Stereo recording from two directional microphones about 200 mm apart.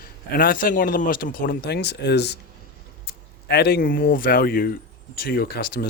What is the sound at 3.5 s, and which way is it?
Speech, 50° left (ahead or behind).